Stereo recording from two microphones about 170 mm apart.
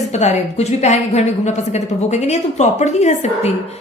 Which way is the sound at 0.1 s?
40° left (ahead or behind).